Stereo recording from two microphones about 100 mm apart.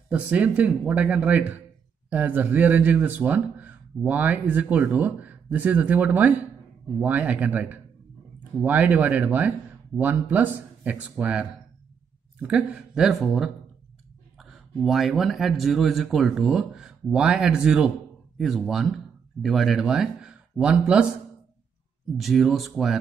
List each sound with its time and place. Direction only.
0.1 s a man's voice: 15° right (ahead or behind)
22.1 s a man's voice: centre (ahead or behind)